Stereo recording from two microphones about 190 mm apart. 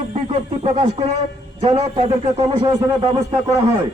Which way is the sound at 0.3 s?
30° right (ahead or behind).